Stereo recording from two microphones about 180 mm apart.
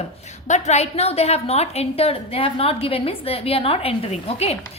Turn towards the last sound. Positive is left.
turn(degrees=35)  # may be behind; listen again after turning